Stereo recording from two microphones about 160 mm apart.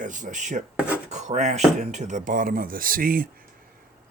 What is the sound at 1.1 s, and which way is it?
Rub, 45° right (ahead or behind).